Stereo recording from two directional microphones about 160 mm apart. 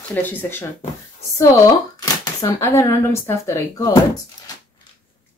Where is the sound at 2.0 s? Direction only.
20° left (ahead or behind).